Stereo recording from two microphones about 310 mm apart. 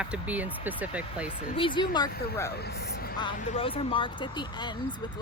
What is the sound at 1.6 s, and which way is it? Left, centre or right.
Speech, centre.